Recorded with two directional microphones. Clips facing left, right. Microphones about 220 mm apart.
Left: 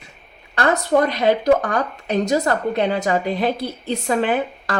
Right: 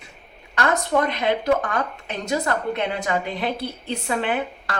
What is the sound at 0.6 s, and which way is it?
A woman's voice, 40° left (ahead or behind).